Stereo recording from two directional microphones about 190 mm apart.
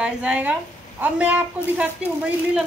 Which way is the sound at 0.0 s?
5° right (ahead or behind).